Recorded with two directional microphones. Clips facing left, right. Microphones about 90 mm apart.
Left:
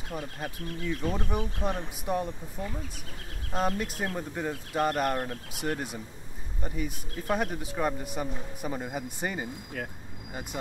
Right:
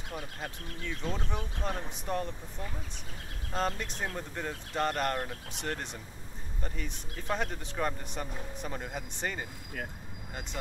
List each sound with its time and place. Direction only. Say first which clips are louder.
0.1 s speech: left 4 dB; 5° left (ahead or behind)
3.5 s speech: left 4 dB; 5° left (ahead or behind)
10.5 s speech: left 3 dB; 15° left (ahead or behind)